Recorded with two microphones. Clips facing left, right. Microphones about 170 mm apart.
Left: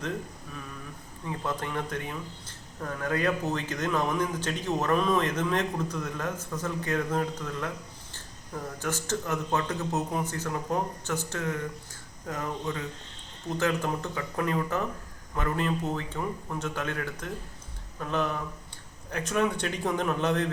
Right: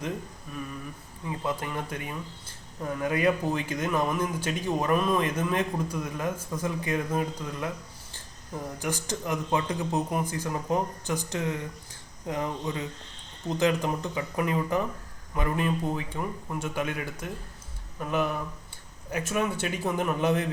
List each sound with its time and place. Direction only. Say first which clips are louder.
1.5 s speech: even; 10° right (ahead or behind)